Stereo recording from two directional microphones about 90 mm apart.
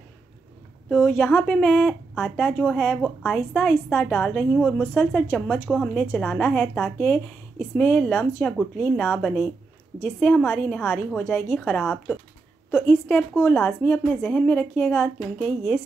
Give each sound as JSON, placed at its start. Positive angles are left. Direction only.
{"t": 0.8, "sound": "a woman's voice", "side_deg": 10}
{"t": 2.1, "sound": "a woman's voice", "side_deg": 0}
{"t": 4.9, "sound": "speech", "side_deg": 20}
{"t": 5.7, "sound": "a woman's voice", "side_deg": 5}
{"t": 7.0, "sound": "a woman's voice", "side_deg": 15}
{"t": 8.2, "sound": "speech", "side_deg": 25}
{"t": 8.5, "sound": "a woman's voice", "side_deg": 10}
{"t": 10.0, "sound": "a woman's voice", "side_deg": 10}
{"t": 12.7, "sound": "a woman's voice", "side_deg": 25}
{"t": 15.3, "sound": "a woman's voice", "side_deg": 10}